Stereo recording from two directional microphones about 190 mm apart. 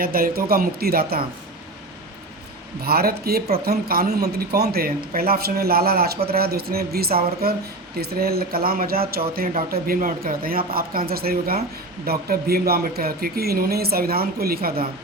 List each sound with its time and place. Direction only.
0.0 s speech: 50° right (ahead or behind)
2.8 s speech: 55° right (ahead or behind)